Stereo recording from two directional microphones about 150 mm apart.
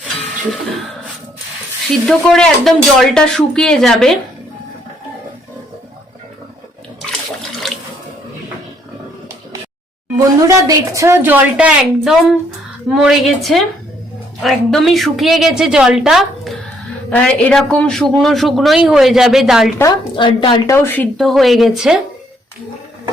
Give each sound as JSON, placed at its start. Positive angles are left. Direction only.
{"t": 2.0, "sound": "speech", "side_deg": 5}
{"t": 7.6, "sound": "sink", "side_deg": 0}
{"t": 10.2, "sound": "a woman's voice", "side_deg": -20}
{"t": 19.8, "sound": "a woman's voice", "side_deg": 30}
{"t": 20.7, "sound": "speech", "side_deg": 15}